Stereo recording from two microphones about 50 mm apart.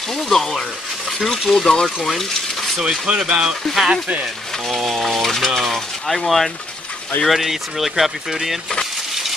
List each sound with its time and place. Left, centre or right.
0.1 s speech: centre
2.0 s water: centre
2.8 s speech: centre